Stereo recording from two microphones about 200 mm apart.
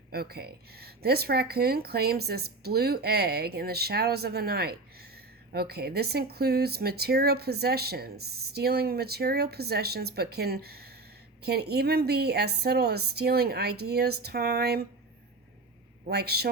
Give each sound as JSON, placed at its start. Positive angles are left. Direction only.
{"t": 0.1, "sound": "speech", "side_deg": -50}
{"t": 16.0, "sound": "speech", "side_deg": -55}